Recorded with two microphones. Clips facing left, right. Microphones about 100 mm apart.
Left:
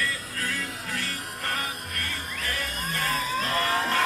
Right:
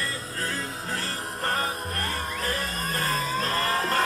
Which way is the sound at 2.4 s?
35° right (ahead or behind).